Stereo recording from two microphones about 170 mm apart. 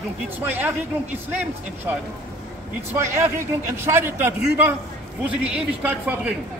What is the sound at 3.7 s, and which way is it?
A man's voice, 15° right (ahead or behind).